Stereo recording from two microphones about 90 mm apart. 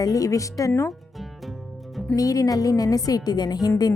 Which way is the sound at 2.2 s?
40° left (ahead or behind).